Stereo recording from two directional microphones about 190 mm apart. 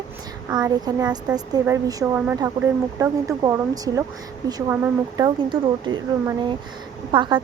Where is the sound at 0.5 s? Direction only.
20° right (ahead or behind).